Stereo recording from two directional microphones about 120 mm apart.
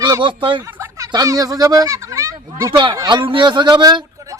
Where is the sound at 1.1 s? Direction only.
30° right (ahead or behind).